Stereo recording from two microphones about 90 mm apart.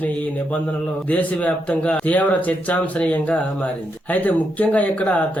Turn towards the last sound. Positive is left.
turn(degrees=15)  # may be behind; listen again after turning